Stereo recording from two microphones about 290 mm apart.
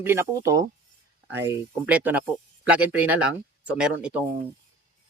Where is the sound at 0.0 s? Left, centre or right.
Centre.